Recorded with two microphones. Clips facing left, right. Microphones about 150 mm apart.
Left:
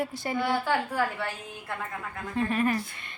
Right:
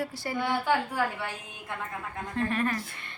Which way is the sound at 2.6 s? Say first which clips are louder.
Left 3 dB; 15° left (ahead or behind).